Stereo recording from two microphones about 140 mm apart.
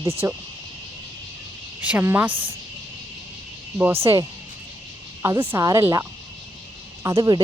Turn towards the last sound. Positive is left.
turn(degrees=-25)  # may be behind; listen again after turning